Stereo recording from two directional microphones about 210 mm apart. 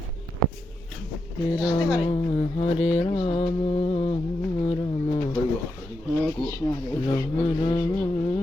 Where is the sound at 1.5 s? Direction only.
5° right (ahead or behind).